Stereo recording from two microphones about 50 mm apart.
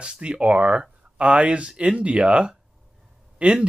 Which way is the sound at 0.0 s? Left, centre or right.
Right.